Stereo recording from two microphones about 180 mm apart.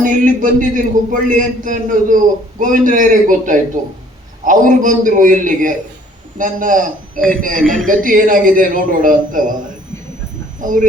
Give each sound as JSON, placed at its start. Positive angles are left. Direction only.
{"t": 0.0, "sound": "a man's voice", "side_deg": -45}
{"t": 7.6, "sound": "a man's voice", "side_deg": 0}
{"t": 7.9, "sound": "a man's voice", "side_deg": -50}
{"t": 10.6, "sound": "speech", "side_deg": -45}